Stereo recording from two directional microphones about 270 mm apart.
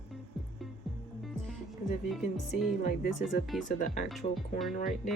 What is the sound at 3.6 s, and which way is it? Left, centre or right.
Speech, left.